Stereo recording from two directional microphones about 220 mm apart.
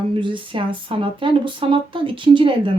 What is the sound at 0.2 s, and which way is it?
Speech, 20° right (ahead or behind).